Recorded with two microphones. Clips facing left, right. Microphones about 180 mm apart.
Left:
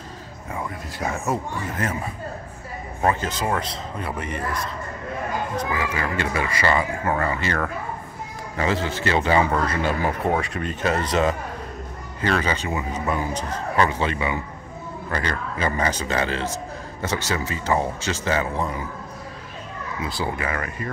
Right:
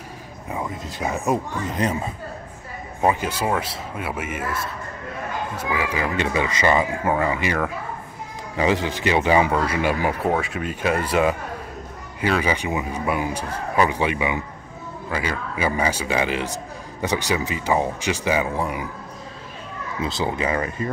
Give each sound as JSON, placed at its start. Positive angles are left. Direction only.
{"t": 0.5, "sound": "a man's voice", "side_deg": -20}
{"t": 10.3, "sound": "a man's voice", "side_deg": 0}
{"t": 20.0, "sound": "speech", "side_deg": -20}